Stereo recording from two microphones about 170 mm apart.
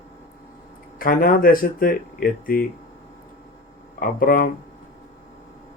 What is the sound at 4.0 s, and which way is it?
Speech, 55° left (ahead or behind).